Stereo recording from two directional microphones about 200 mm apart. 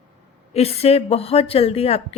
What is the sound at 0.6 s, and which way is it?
A woman's voice, 30° left (ahead or behind).